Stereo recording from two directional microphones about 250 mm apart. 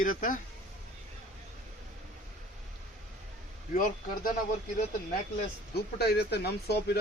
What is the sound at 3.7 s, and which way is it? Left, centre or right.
Speech, left.